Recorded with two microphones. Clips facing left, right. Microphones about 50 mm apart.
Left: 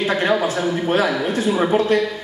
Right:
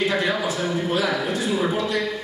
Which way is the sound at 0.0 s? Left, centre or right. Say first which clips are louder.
Left 4 dB; left.